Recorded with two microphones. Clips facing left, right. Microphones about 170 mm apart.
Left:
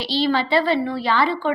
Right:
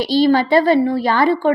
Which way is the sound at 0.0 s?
45° right (ahead or behind).